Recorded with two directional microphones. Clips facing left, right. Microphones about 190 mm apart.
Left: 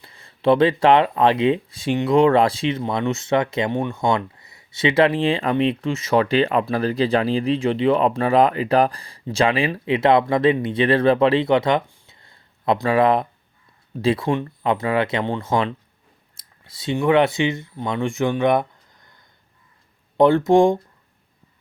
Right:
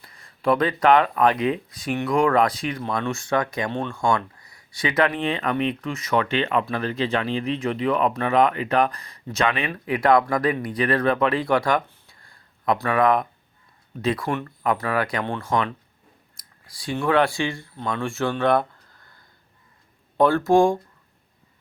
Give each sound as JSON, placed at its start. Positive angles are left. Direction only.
{"t": 0.0, "sound": "speech", "side_deg": 25}
{"t": 20.1, "sound": "speech", "side_deg": 20}